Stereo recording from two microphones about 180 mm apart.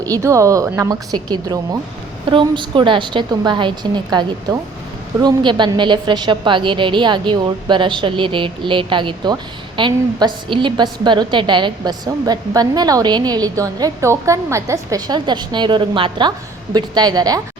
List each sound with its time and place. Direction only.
0.0 s a woman's voice: 20° right (ahead or behind)